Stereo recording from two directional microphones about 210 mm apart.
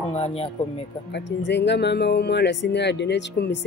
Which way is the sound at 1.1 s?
55° left (ahead or behind).